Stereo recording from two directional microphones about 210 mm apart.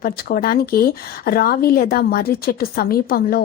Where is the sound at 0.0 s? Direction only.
45° left (ahead or behind).